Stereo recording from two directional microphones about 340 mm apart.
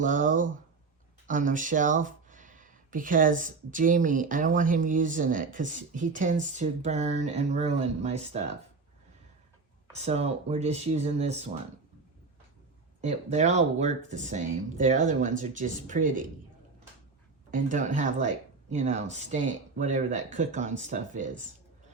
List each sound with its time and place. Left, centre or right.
0.0 s speech: right
9.9 s speech: centre
13.0 s speech: centre
17.5 s speech: right